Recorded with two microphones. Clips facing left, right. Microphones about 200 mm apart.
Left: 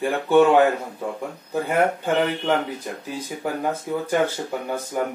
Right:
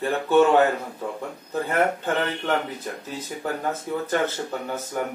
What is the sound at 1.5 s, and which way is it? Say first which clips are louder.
Speech: left 2 dB; 10° left (ahead or behind).